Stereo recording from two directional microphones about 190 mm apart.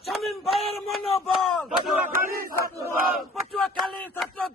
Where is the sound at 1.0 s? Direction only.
30° left (ahead or behind).